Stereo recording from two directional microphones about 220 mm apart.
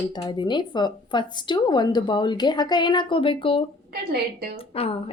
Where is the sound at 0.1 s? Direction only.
20° left (ahead or behind).